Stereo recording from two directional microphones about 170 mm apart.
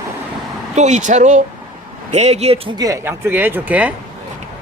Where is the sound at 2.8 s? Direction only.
15° right (ahead or behind).